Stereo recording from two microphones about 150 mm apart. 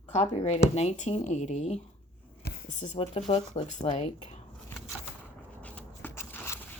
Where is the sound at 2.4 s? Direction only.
55° left (ahead or behind).